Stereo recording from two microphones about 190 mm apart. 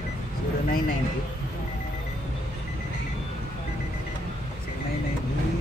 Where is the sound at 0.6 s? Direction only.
50° left (ahead or behind).